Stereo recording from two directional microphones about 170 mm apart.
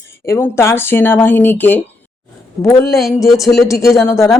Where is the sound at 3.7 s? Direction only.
20° left (ahead or behind).